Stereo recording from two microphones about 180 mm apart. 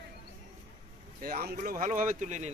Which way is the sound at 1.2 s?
55° right (ahead or behind).